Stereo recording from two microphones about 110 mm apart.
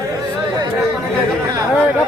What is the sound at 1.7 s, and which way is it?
Speech, 15° right (ahead or behind).